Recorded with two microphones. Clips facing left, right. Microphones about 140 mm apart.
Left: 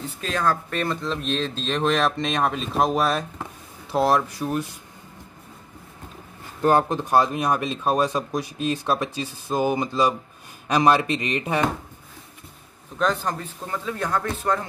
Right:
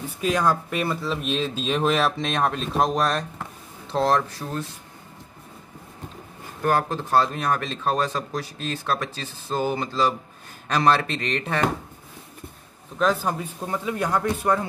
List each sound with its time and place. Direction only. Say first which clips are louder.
0.0 s speech: right 2 dB; 10° right (ahead or behind); by 4.6 s 15° left (ahead or behind)
6.6 s speech: left 3 dB; 20° left (ahead or behind)
13.0 s a man's voice: right 1 dB; 5° right (ahead or behind)